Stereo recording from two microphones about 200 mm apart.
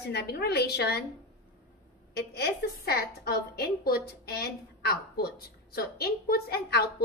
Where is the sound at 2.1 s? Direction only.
55° left (ahead or behind).